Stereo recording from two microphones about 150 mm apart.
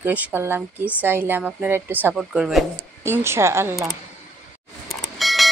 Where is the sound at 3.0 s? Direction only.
15° right (ahead or behind).